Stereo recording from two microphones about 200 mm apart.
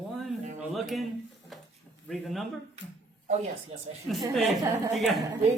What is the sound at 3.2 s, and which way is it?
Speech, 35° right (ahead or behind).